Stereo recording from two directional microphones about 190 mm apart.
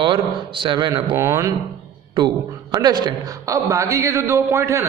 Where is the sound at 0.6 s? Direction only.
25° right (ahead or behind).